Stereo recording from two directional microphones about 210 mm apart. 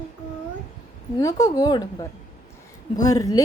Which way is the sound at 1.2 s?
15° left (ahead or behind).